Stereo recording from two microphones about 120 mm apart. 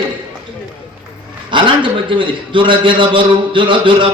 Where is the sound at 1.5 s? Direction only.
45° right (ahead or behind).